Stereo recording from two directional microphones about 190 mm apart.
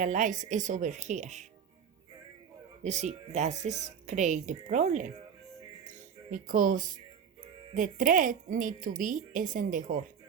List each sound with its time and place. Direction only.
0.0 s speech: 40° right (ahead or behind)
2.8 s speech: 40° right (ahead or behind)